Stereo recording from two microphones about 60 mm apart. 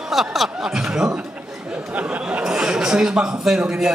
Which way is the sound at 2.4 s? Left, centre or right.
Centre.